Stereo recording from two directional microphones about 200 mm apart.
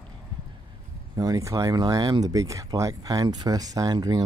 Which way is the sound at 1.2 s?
15° right (ahead or behind).